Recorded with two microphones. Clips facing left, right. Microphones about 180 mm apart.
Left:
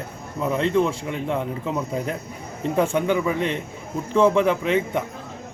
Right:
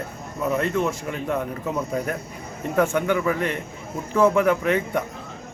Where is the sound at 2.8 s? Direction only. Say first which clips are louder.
Even; 25° left (ahead or behind).